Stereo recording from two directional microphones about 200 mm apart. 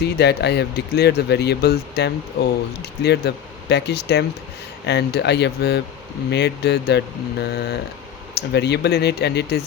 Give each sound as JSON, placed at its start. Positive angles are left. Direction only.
{"t": 0.0, "sound": "speech", "side_deg": 55}